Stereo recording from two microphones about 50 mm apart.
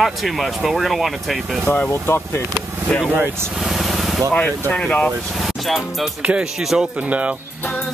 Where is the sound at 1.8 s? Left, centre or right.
Left.